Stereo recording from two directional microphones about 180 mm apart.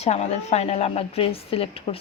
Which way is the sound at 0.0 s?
35° left (ahead or behind).